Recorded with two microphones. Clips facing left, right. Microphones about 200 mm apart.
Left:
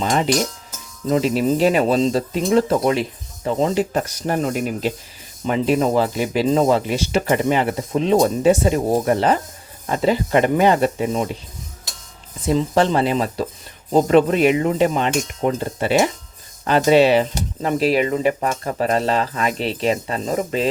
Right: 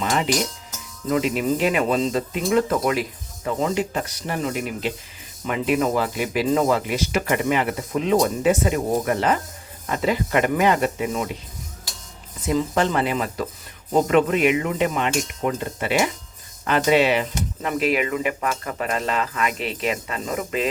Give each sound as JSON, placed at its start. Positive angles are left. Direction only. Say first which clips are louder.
{"t": 0.0, "sound": "speech", "louder": "left 3 dB", "side_deg": 30}
{"t": 3.9, "sound": "speech", "louder": "left 6 dB", "side_deg": 45}
{"t": 5.5, "sound": "speech", "louder": "left 3 dB", "side_deg": 30}
{"t": 12.5, "sound": "speech", "louder": "left 4 dB", "side_deg": 30}